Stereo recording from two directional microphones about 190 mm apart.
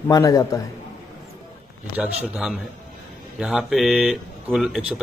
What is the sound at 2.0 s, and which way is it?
Speech, centre (ahead or behind).